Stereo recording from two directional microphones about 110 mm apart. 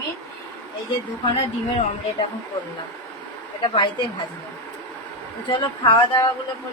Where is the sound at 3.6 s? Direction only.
45° left (ahead or behind).